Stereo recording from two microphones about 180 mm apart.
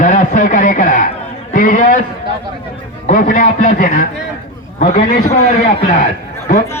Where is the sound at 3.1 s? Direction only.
45° left (ahead or behind).